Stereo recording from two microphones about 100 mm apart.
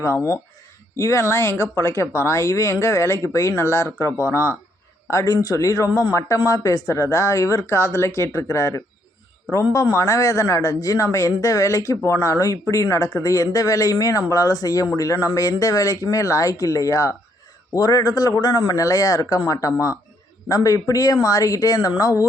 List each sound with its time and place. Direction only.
0.0 s speech: 25° left (ahead or behind)